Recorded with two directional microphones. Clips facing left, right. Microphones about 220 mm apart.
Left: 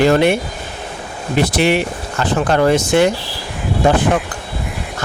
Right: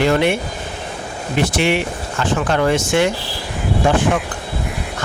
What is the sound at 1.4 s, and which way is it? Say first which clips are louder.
Speech: left 3 dB; 35° left (ahead or behind).